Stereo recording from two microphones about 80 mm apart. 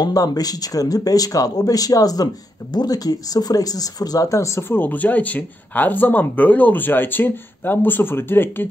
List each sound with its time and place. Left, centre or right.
0.0 s speech: left